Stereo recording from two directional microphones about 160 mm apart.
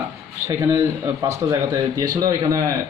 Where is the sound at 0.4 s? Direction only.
15° right (ahead or behind).